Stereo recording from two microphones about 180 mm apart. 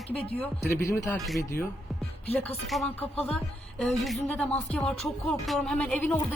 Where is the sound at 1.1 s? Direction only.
Centre (ahead or behind).